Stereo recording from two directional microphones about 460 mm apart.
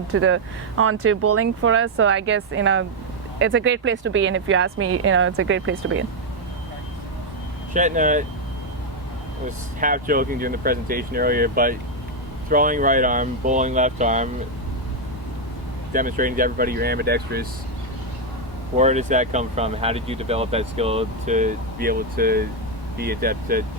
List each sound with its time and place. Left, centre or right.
0.1 s speech: right
7.7 s speech: centre
9.8 s speech: centre
15.9 s speech: centre
18.8 s speech: centre